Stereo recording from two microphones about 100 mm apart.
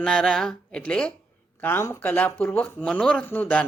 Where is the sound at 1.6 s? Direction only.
25° left (ahead or behind).